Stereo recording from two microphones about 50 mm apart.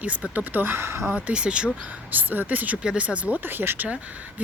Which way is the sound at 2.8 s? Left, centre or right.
Right.